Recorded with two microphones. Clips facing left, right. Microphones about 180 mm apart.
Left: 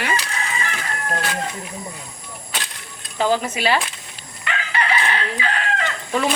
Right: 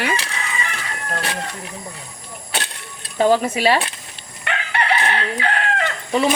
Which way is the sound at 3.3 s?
35° right (ahead or behind).